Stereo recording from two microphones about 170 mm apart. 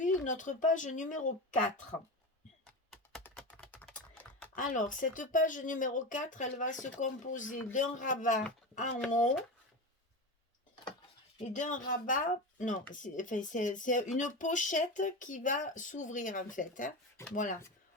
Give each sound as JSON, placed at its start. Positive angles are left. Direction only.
{"t": 0.0, "sound": "speech", "side_deg": 50}
{"t": 2.9, "sound": "typing", "side_deg": 0}
{"t": 4.5, "sound": "speech", "side_deg": 50}
{"t": 11.5, "sound": "speech", "side_deg": 50}